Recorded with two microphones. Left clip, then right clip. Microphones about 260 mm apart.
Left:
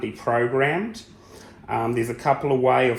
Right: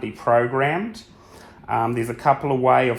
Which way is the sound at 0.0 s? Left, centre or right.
Right.